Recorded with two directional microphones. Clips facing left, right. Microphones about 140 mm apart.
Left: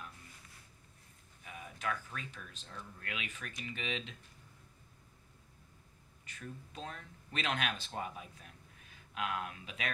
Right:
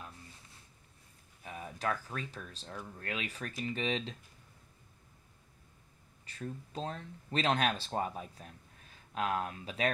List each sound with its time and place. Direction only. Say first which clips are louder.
1.4 s speech: right 4 dB; 35° right (ahead or behind)
6.2 s speech: right 6 dB; 35° right (ahead or behind)